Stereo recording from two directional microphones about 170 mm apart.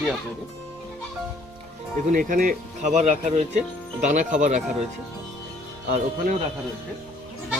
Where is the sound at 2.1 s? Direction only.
55° right (ahead or behind).